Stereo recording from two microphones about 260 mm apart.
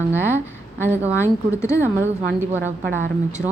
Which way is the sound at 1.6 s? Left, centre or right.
Centre.